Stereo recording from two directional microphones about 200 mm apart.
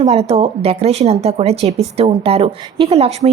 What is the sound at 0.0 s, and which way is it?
A woman's voice, 30° right (ahead or behind).